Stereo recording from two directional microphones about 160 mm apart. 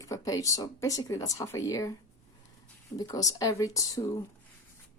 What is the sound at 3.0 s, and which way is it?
Speech, 20° left (ahead or behind).